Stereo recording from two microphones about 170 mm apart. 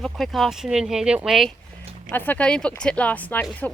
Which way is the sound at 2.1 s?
10° left (ahead or behind).